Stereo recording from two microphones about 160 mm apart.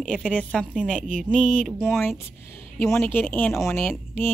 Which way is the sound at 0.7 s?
5° left (ahead or behind).